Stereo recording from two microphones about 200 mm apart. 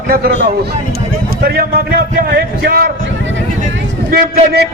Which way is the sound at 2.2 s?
55° right (ahead or behind).